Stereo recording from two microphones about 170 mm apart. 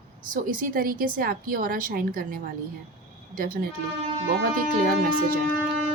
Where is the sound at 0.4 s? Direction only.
55° right (ahead or behind).